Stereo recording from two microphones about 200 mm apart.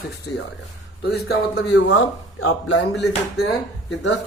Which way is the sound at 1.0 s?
55° left (ahead or behind).